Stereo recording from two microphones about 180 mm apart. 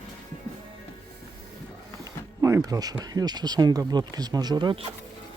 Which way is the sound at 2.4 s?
20° right (ahead or behind).